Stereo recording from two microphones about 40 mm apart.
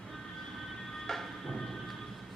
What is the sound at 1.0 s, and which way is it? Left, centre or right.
Music, centre.